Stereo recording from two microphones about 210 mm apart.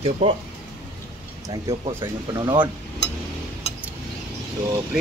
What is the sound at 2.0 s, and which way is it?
Speech, 20° right (ahead or behind).